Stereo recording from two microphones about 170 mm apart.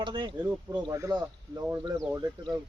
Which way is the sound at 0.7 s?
25° right (ahead or behind).